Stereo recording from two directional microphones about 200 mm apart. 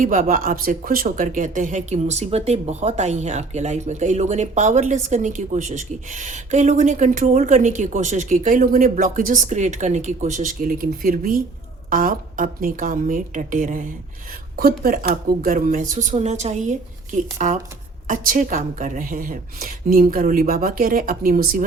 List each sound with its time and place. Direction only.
0.0 s a woman's voice: 45° right (ahead or behind)